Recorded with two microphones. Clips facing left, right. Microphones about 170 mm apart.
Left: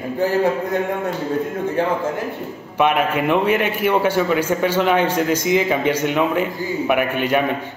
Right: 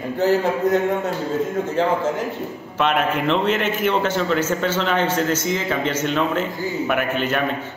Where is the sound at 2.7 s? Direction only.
10° left (ahead or behind).